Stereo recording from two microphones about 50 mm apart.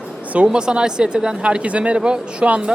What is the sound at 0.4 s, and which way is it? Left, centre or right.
Speech, centre.